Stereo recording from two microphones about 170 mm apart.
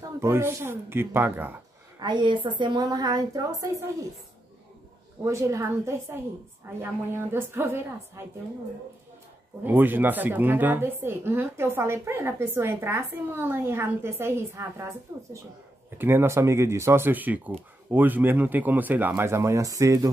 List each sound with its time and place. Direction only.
0.2 s speech: 15° right (ahead or behind)
2.0 s a woman's voice: 25° right (ahead or behind)
5.2 s speech: 15° right (ahead or behind)
9.7 s speech: 10° right (ahead or behind)